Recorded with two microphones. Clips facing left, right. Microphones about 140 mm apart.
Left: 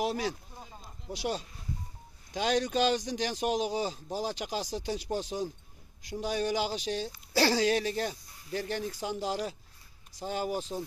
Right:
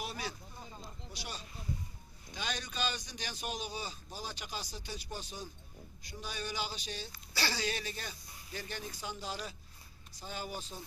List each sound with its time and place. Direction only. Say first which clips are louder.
0.0 s speech: left 10 dB; 90° left
10.1 s speech: left 10 dB; 90° left